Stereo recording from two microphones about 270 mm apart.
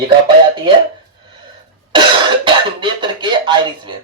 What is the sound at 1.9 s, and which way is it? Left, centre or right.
Cough, centre.